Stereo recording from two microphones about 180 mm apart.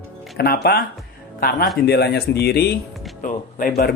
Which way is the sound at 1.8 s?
65° left (ahead or behind).